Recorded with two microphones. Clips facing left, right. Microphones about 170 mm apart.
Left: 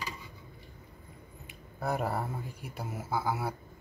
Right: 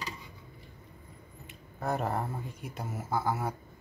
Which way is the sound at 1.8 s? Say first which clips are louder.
Even; 10° left (ahead or behind).